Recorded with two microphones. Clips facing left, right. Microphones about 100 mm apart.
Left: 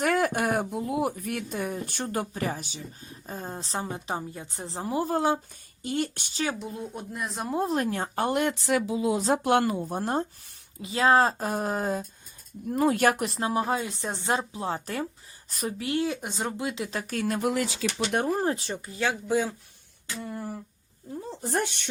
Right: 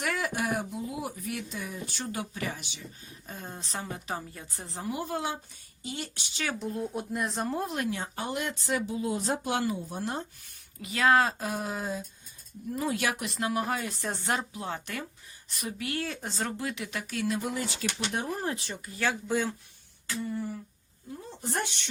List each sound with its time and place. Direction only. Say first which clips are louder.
0.0 s speech: left 6 dB; 50° left (ahead or behind)
5.8 s speech: left 9 dB; 50° left (ahead or behind)
6.6 s speech: right 3 dB; centre (ahead or behind)
7.5 s speech: left 5 dB; 30° left (ahead or behind)
10.8 s a woman's voice: left 3 dB; 30° left (ahead or behind)
15.8 s speech: left 6 dB; 20° left (ahead or behind); by 17.4 s 45° left (ahead or behind)
17.4 s speech: left 6 dB; 80° left
18.3 s speech: left 6 dB; 30° left (ahead or behind)
18.9 s speech: left 3 dB; 15° left (ahead or behind)
20.2 s a sound: right 2 dB; 90° left
21.4 s speech: left 4 dB; 50° left (ahead or behind)